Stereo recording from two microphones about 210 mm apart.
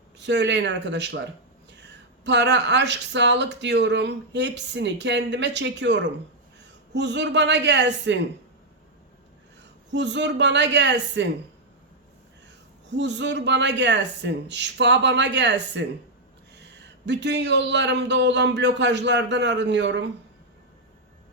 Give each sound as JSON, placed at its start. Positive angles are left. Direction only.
{"t": 0.2, "sound": "speech", "side_deg": -55}
{"t": 9.9, "sound": "speech", "side_deg": -55}
{"t": 13.0, "sound": "speech", "side_deg": -55}